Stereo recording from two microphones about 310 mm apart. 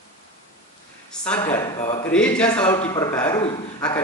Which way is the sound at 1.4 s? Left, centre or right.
Centre.